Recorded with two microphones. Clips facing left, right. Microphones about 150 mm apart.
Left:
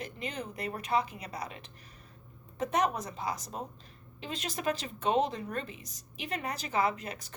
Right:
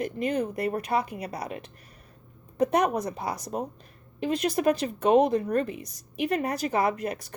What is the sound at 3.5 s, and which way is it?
Speech, 50° right (ahead or behind).